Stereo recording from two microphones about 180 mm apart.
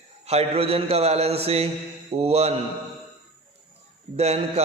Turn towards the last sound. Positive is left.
turn(degrees=-35)  # may be behind; listen again after turning